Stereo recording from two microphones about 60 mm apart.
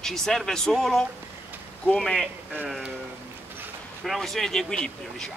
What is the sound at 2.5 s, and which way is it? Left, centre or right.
Speech, right.